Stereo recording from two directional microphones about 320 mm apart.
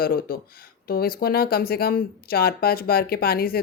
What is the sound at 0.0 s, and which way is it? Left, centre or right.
Speech, left.